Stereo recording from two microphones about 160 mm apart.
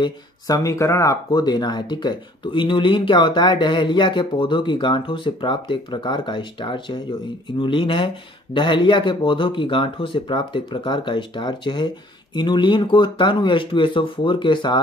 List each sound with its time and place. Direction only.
0.0 s speech: 20° left (ahead or behind)